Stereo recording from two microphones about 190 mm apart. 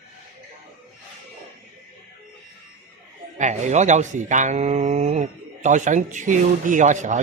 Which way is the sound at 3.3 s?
40° right (ahead or behind).